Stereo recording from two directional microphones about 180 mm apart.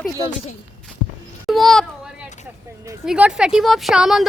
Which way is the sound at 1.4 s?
Centre (ahead or behind).